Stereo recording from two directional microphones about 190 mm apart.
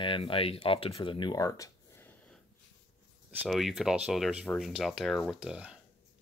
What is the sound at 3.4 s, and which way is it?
Speech, centre (ahead or behind).